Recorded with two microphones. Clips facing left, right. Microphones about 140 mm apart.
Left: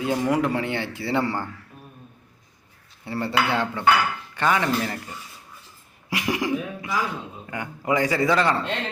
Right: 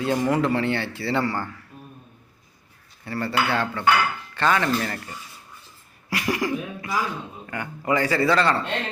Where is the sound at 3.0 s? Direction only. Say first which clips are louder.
Left 1 dB; 20° left (ahead or behind).